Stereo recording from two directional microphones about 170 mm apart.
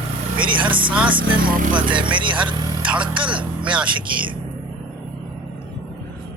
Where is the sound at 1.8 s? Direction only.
30° right (ahead or behind).